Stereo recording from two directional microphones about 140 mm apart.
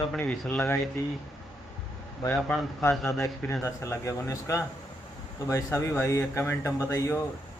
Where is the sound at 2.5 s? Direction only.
20° left (ahead or behind).